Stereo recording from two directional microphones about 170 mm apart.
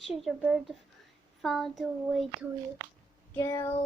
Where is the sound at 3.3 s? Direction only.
15° left (ahead or behind).